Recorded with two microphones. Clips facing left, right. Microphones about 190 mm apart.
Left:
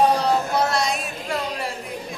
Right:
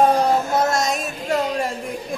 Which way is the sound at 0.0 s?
50° right (ahead or behind).